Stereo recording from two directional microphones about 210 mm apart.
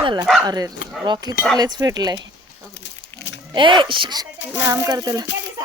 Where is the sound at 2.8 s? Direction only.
60° left (ahead or behind).